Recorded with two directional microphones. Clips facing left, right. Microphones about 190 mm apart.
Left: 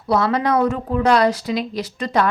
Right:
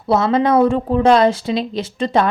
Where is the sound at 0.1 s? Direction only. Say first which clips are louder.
Right 3 dB; 25° right (ahead or behind).